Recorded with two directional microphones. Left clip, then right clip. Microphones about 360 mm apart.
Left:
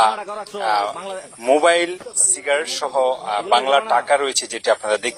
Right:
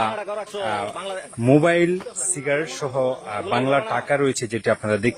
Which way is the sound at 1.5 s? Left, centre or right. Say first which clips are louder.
Left 2 dB; right.